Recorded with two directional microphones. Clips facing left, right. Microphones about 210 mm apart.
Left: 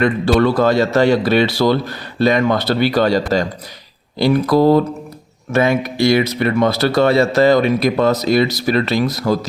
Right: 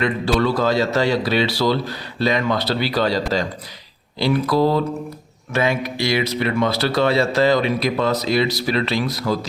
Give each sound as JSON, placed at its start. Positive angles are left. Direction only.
{"t": 0.0, "sound": "speech", "side_deg": 55}